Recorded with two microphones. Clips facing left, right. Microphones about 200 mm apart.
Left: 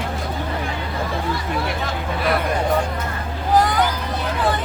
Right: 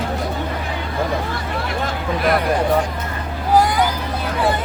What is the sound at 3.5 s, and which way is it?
Hubbub, 10° right (ahead or behind).